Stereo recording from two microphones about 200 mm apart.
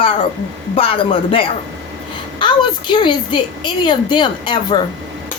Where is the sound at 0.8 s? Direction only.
25° left (ahead or behind).